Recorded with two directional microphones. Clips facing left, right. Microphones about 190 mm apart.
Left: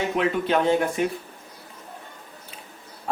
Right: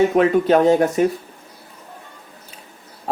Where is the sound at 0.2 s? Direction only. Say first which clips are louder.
Right 4 dB; 45° right (ahead or behind).